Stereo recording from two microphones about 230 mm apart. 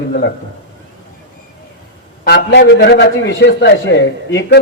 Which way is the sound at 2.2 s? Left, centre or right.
Left.